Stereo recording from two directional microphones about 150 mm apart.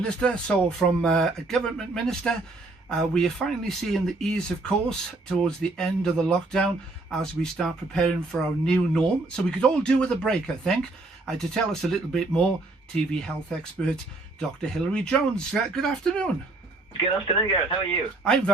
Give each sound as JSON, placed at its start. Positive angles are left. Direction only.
{"t": 0.0, "sound": "speech", "side_deg": 5}
{"t": 17.2, "sound": "speech", "side_deg": 30}
{"t": 17.8, "sound": "speech", "side_deg": 5}